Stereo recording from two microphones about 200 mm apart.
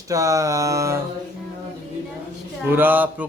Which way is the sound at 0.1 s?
15° right (ahead or behind).